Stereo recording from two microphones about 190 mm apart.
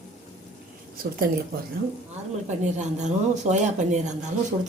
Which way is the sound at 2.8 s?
40° right (ahead or behind).